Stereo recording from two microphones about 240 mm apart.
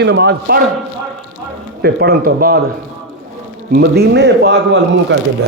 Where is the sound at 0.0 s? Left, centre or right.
Right.